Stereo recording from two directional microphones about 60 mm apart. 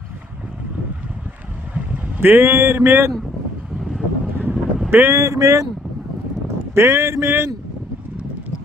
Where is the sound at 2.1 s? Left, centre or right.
Right.